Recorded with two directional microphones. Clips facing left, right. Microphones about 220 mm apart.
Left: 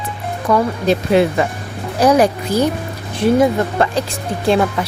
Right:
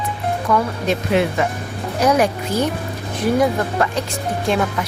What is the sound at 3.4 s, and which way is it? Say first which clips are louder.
Speech: left 3 dB; 30° left (ahead or behind).